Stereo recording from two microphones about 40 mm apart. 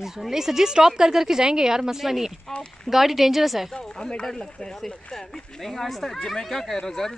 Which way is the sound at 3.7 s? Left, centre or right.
Left.